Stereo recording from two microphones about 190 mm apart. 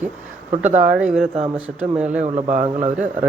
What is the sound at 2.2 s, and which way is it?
Speech, 40° right (ahead or behind).